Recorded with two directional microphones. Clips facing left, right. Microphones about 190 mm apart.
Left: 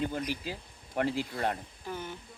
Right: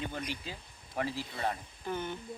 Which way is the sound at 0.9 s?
55° left (ahead or behind).